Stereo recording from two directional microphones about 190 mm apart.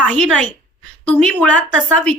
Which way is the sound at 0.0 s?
5° left (ahead or behind).